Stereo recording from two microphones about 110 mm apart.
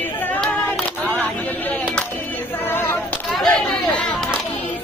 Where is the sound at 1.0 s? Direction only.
15° left (ahead or behind).